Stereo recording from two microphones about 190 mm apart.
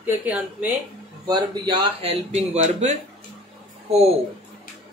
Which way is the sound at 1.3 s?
30° right (ahead or behind).